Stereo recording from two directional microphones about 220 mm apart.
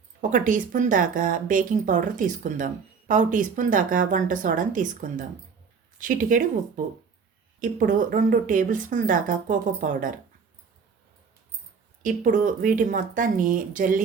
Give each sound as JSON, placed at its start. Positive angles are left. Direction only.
{"t": 0.2, "sound": "speech", "side_deg": -35}
{"t": 12.0, "sound": "speech", "side_deg": -35}